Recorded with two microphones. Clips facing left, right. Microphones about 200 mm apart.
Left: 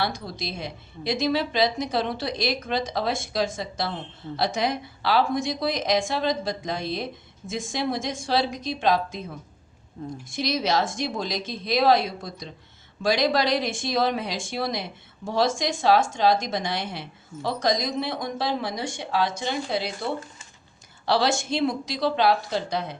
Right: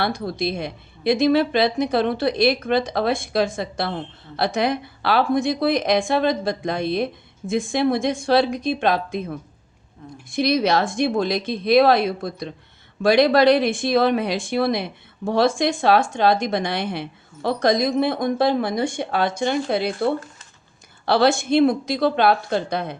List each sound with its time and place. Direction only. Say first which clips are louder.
0.0 s speech: right 6 dB; 55° right (ahead or behind)
10.2 s speech: right 7 dB; 60° right (ahead or behind)